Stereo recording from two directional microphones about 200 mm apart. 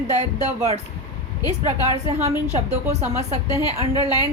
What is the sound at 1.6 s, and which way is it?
A woman's voice, 35° right (ahead or behind).